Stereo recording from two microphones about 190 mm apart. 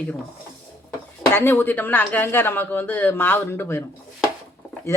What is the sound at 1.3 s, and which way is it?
A woman's voice, 10° left (ahead or behind).